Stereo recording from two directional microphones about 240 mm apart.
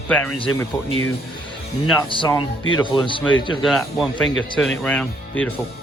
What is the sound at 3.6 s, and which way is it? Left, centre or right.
Speech, centre.